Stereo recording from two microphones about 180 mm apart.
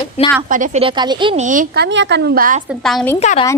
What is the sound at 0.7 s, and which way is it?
Speech, 25° right (ahead or behind).